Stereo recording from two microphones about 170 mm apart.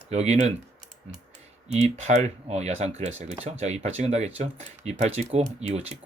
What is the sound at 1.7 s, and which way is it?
Speech, 40° right (ahead or behind).